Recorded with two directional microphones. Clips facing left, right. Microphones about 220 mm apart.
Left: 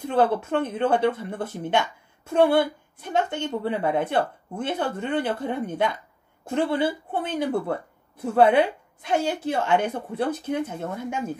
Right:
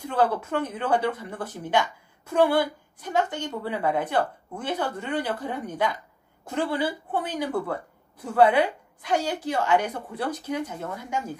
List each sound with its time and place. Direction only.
0.0 s a woman's voice: 25° left (ahead or behind)